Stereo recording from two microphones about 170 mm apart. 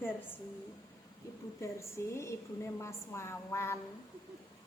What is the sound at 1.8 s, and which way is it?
A woman's voice, 15° left (ahead or behind).